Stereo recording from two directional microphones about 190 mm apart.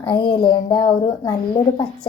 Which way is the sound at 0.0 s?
25° left (ahead or behind).